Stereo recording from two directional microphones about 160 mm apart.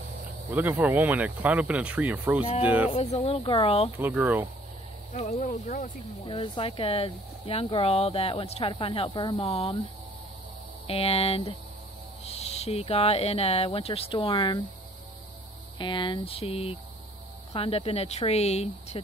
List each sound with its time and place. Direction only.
0.5 s speech: 10° right (ahead or behind)
2.9 s speech: 40° left (ahead or behind)
4.0 s speech: 10° right (ahead or behind)
5.2 s speech: 50° left (ahead or behind)
6.2 s speech: 30° left (ahead or behind)
10.9 s speech: 40° left (ahead or behind)
15.8 s speech: 30° left (ahead or behind)